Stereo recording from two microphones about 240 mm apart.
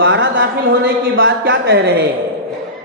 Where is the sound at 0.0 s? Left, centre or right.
Right.